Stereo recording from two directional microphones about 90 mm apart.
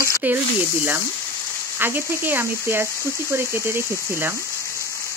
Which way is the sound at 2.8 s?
30° left (ahead or behind).